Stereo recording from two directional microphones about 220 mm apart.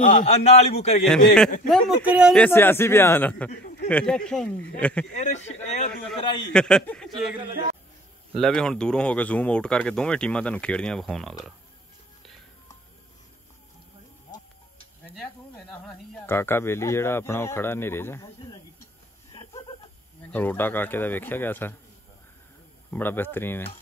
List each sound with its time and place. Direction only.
0.0 s a man's voice: 30° left (ahead or behind)
1.0 s speech: 5° left (ahead or behind)
2.4 s speech: 10° left (ahead or behind)
5.1 s a man's voice: 30° left (ahead or behind)
6.5 s speech: 5° left (ahead or behind)
8.4 s speech: centre (ahead or behind)
15.0 s a sound: 5° left (ahead or behind)
15.9 s speech: 10° left (ahead or behind)
20.2 s speech: 10° left (ahead or behind)
22.8 s speech: 10° left (ahead or behind)